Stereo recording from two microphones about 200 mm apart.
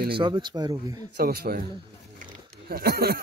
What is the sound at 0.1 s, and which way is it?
Speech, 25° right (ahead or behind).